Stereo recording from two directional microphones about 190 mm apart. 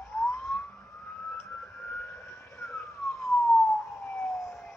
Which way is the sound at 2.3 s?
15° left (ahead or behind).